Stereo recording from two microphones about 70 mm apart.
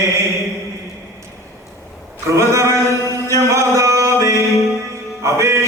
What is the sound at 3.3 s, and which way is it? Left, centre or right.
Music, right.